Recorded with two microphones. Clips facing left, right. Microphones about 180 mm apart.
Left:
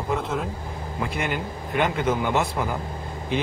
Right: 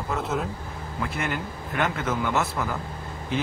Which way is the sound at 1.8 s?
15° left (ahead or behind).